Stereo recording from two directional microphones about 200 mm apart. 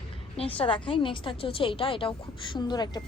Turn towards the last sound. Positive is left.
turn(degrees=20)  # may be behind; listen again after turning